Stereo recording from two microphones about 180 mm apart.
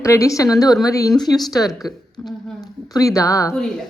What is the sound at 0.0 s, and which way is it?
A woman's voice, 15° left (ahead or behind).